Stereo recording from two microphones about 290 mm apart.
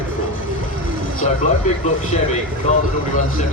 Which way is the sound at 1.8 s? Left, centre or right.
Left.